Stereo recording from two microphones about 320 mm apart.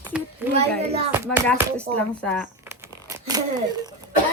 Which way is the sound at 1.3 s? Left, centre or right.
Centre.